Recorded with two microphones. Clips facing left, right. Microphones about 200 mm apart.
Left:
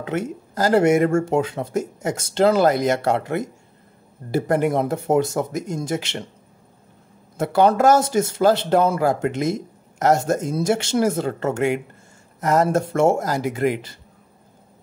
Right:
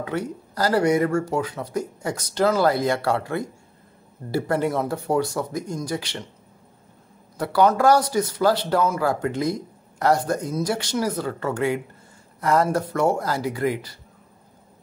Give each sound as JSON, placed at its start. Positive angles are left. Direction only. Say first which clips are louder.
{"t": 0.0, "sound": "speech", "louder": "left 2 dB", "side_deg": 25}
{"t": 7.3, "sound": "speech", "louder": "left 2 dB", "side_deg": 25}